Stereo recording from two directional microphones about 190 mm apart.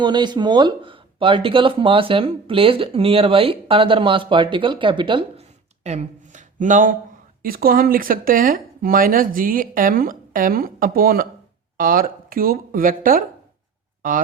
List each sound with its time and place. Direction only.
0.0 s speech: 25° right (ahead or behind); by 13.2 s 45° right (ahead or behind)